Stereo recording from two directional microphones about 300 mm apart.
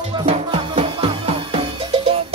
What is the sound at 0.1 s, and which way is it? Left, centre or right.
Music, centre.